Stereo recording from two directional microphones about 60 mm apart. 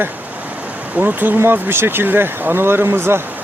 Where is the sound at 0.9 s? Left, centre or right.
Right.